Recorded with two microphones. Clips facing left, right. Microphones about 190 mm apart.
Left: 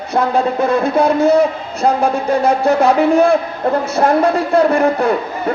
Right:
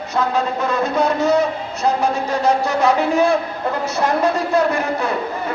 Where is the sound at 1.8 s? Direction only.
55° left (ahead or behind).